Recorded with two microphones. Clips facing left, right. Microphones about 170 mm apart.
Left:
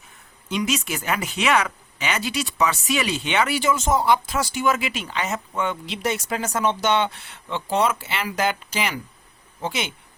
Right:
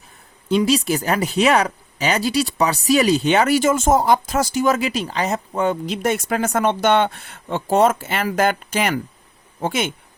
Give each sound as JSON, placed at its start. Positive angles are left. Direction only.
{"t": 0.4, "sound": "speech", "side_deg": -35}